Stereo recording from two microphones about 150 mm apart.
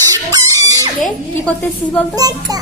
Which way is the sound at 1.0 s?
10° left (ahead or behind).